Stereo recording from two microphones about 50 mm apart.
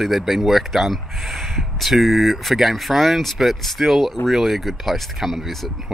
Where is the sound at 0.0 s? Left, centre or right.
Centre.